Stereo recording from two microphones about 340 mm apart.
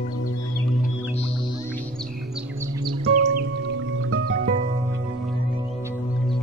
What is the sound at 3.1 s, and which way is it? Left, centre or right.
Music, right.